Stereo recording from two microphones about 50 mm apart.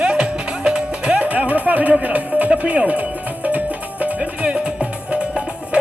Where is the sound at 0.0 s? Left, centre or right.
Centre.